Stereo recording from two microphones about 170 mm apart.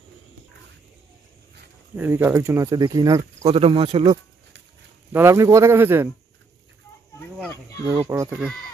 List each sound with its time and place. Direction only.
2.0 s speech: 10° right (ahead or behind)
3.4 s speech: 35° right (ahead or behind)
5.1 s speech: 15° right (ahead or behind)
7.4 s speech: 15° left (ahead or behind)
7.8 s speech: 15° right (ahead or behind)